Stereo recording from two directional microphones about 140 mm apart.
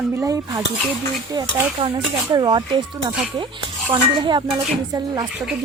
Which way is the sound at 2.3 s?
30° right (ahead or behind).